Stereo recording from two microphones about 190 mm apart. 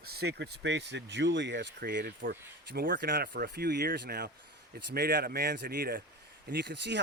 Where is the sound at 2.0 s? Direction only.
55° right (ahead or behind).